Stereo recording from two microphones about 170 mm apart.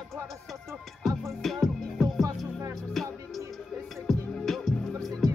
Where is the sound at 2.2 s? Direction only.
20° right (ahead or behind).